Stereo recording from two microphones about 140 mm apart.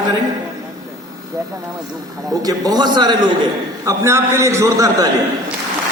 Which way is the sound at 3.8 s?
20° right (ahead or behind).